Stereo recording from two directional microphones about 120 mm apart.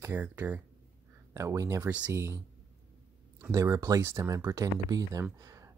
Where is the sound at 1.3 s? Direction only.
25° right (ahead or behind).